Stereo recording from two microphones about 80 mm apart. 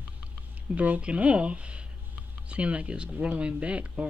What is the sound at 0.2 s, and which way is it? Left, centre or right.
Speech, centre.